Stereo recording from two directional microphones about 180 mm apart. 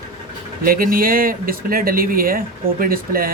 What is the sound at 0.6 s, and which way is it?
Speech, 55° right (ahead or behind).